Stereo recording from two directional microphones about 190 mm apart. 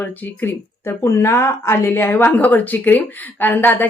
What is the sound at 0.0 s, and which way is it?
Speech, 10° left (ahead or behind).